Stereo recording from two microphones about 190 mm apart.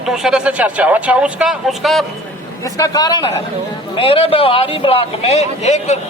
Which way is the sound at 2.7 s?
20° left (ahead or behind).